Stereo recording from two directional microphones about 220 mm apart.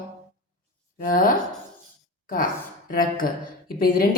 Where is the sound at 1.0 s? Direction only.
40° left (ahead or behind).